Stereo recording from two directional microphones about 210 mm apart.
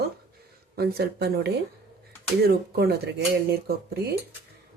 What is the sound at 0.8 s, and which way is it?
Speech, 50° right (ahead or behind).